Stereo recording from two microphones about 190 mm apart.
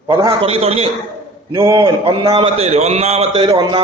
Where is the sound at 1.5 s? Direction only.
15° right (ahead or behind).